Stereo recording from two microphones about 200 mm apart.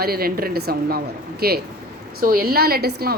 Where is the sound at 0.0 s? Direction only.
50° right (ahead or behind).